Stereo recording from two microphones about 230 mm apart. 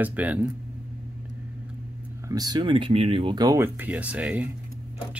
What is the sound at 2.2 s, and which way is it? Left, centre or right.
Speech, centre.